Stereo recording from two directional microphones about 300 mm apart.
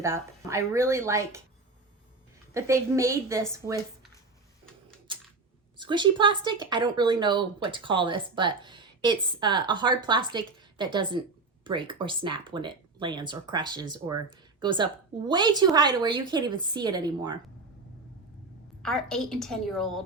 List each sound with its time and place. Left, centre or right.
0.0 s speech: centre
2.5 s speech: centre
5.1 s typing: centre
5.7 s speech: centre
18.8 s a woman's voice: centre